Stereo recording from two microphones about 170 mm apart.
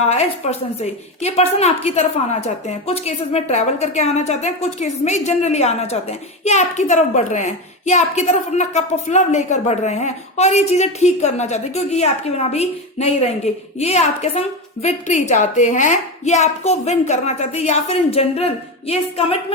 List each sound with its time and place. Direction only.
0.0 s a woman's voice: 40° left (ahead or behind)